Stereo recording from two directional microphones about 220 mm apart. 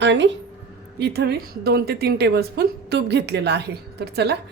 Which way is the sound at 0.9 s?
50° right (ahead or behind).